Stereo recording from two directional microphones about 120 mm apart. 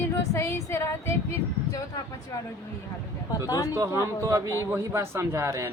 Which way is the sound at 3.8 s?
25° right (ahead or behind).